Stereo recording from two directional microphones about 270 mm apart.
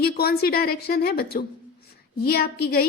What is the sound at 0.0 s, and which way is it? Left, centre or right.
A woman's voice, left.